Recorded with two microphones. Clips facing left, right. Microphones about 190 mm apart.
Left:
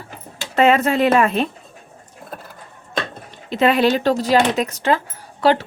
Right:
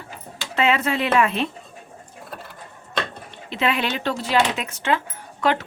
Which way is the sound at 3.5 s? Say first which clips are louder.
Left 8 dB; 40° left (ahead or behind).